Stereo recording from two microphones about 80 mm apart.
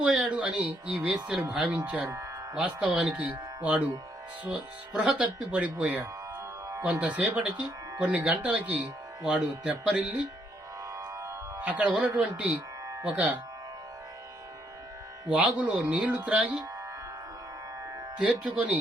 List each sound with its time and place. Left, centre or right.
0.0 s speech: centre
2.6 s speech: centre
4.9 s speech: centre
10.9 s music: right
11.6 s speech: centre
11.9 s a man's voice: centre
13.0 s speech: centre
15.3 s speech: centre
18.2 s speech: centre